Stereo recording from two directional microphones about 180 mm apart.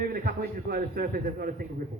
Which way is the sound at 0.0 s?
55° right (ahead or behind).